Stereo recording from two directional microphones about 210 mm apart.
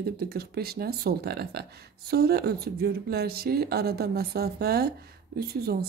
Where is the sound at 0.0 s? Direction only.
50° right (ahead or behind).